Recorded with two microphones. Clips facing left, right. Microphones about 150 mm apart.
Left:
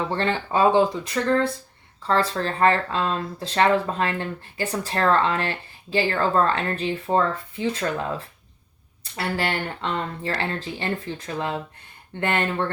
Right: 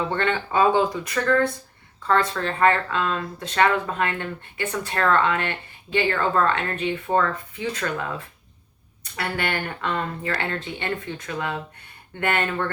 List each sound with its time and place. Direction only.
0.1 s speech: 30° left (ahead or behind)
9.1 s speech: 30° left (ahead or behind)